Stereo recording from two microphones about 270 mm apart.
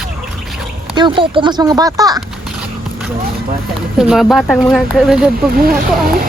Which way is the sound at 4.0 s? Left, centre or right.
Centre.